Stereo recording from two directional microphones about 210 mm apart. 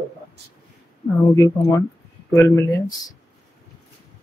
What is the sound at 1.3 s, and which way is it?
Speech, 15° left (ahead or behind).